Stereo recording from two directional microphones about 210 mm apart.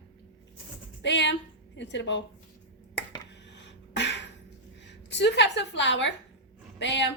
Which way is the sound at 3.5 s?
55° left (ahead or behind).